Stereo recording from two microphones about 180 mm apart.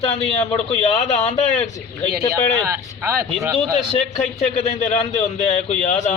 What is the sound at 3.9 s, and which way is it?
A man's voice, 35° left (ahead or behind).